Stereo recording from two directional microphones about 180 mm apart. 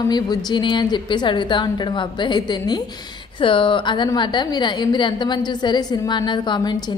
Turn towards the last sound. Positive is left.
turn(degrees=25)  # may be behind; listen again after turning